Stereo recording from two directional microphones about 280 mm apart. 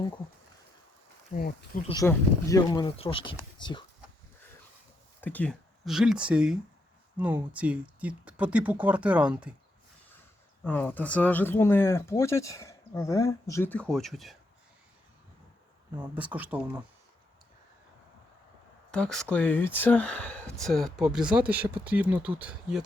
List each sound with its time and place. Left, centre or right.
1.3 s speech: left
1.9 s speech: centre
5.2 s speech: centre
10.6 s speech: centre
16.0 s speech: centre
18.9 s speech: centre